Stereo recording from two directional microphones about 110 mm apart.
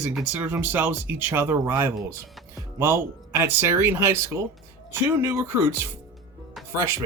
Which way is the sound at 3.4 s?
20° right (ahead or behind).